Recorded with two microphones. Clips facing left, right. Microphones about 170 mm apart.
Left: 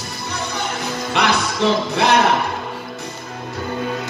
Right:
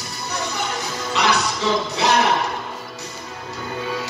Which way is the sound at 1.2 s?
60° left (ahead or behind).